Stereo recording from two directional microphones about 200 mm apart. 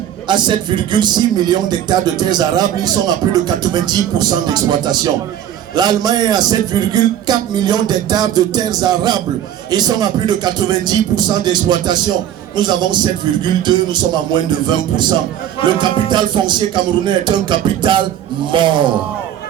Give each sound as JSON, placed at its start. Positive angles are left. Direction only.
{"t": 0.3, "sound": "a man's voice", "side_deg": -20}
{"t": 15.6, "sound": "a man's voice", "side_deg": -20}